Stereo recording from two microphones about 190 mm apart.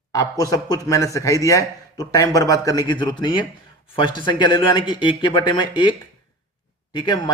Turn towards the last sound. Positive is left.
turn(degrees=25)  # may be behind; listen again after turning